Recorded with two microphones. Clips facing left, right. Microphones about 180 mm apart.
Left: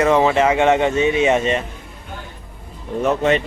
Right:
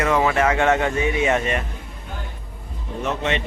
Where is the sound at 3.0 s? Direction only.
45° left (ahead or behind).